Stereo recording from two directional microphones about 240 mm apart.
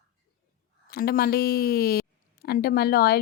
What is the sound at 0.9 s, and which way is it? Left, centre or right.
A woman's voice, left.